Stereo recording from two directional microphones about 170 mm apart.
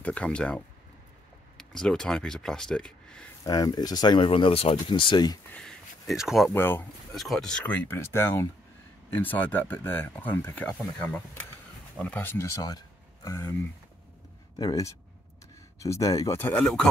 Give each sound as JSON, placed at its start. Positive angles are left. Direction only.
{"t": 0.0, "sound": "speech", "side_deg": 5}
{"t": 3.4, "sound": "speech", "side_deg": 20}
{"t": 5.5, "sound": "speech", "side_deg": 5}
{"t": 6.5, "sound": "speech", "side_deg": 15}
{"t": 7.2, "sound": "speech", "side_deg": 0}
{"t": 14.6, "sound": "speech", "side_deg": 20}